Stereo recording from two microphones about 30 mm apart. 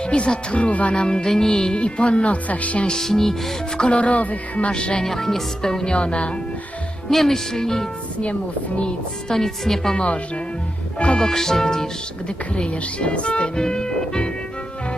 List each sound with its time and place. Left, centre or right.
0.1 s speech: left
0.9 s music: left
1.7 s speech: left
2.5 s speech: left
3.0 s speech: centre
3.8 s speech: left
4.7 s speech: left
5.0 s speech: centre
5.9 s speech: left
7.1 s speech: centre
9.3 s speech: centre
11.2 s speech: centre
12.5 s speech: left
13.4 s music: left